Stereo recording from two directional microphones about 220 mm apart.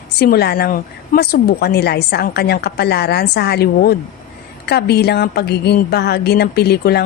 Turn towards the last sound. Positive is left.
turn(degrees=45)  # may be behind; listen again after turning